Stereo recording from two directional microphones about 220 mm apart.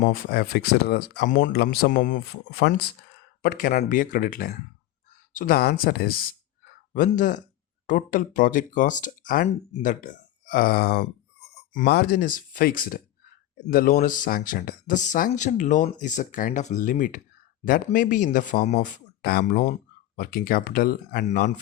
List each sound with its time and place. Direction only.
0.0 s speech: 40° left (ahead or behind)